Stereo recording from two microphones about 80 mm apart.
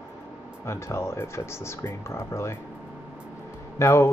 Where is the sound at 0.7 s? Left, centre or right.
Left.